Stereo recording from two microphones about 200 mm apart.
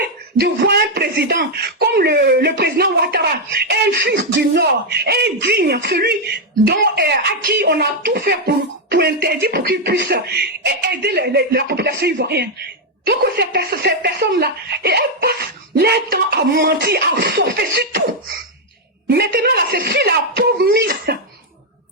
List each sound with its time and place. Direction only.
0.3 s speech: 55° right (ahead or behind)
19.0 s speech: 50° right (ahead or behind)